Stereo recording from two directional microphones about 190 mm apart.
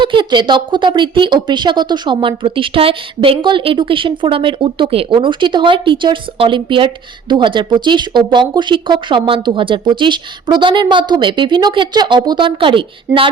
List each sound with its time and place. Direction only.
0.0 s speech: 25° right (ahead or behind)